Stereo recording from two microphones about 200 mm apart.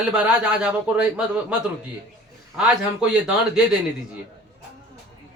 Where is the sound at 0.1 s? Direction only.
5° right (ahead or behind).